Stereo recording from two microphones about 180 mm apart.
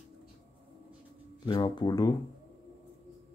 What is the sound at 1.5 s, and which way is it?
Speech, 25° left (ahead or behind).